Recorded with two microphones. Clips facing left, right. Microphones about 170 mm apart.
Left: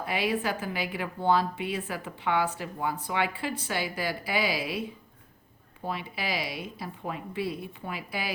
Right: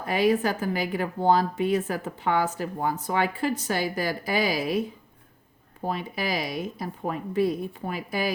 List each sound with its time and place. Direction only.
0.0 s speech: 45° right (ahead or behind)
5.8 s speech: 45° right (ahead or behind)